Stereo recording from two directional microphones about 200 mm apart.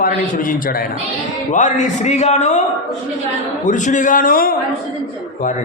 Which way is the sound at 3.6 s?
40° left (ahead or behind).